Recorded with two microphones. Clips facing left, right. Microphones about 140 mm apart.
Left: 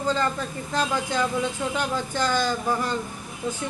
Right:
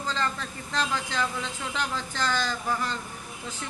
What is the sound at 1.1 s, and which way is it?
Speech, 15° left (ahead or behind).